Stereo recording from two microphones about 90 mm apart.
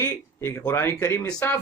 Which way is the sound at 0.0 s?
30° left (ahead or behind).